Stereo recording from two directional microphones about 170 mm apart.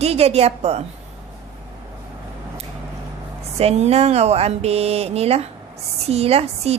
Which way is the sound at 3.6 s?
40° right (ahead or behind).